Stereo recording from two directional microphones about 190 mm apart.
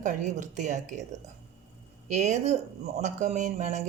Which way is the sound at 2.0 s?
40° right (ahead or behind).